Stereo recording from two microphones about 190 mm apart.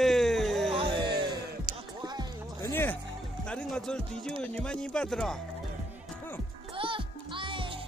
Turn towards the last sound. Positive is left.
turn(degrees=-25)  # may be behind; listen again after turning